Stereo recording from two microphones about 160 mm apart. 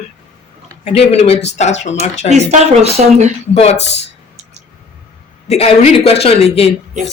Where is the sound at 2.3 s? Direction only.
45° right (ahead or behind).